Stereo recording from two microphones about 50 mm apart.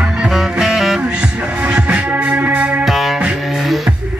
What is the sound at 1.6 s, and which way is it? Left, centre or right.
Music, right.